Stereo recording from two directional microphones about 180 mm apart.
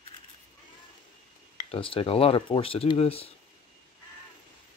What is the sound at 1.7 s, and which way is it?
Speech, 30° left (ahead or behind).